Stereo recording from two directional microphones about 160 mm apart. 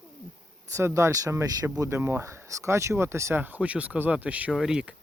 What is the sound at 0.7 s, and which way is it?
Speech, 20° right (ahead or behind).